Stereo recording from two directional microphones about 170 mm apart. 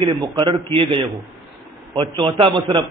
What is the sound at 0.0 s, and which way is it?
A man's voice, 30° right (ahead or behind).